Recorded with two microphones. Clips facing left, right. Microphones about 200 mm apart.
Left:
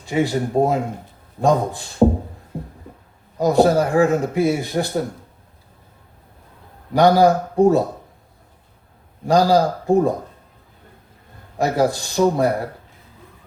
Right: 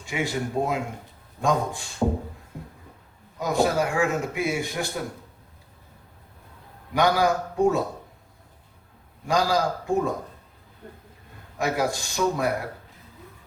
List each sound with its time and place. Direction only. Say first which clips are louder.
0.0 s a man's voice: left 8 dB; 35° left (ahead or behind)
2.5 s a sound: left 10 dB; 35° left (ahead or behind)
3.3 s a man's voice: left 8 dB; 35° left (ahead or behind)
6.9 s a man's voice: left 8 dB; 35° left (ahead or behind)
9.2 s a man's voice: left 8 dB; 35° left (ahead or behind)
11.5 s a man's voice: left 7 dB; 35° left (ahead or behind)